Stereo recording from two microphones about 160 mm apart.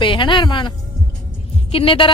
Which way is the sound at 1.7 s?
35° left (ahead or behind).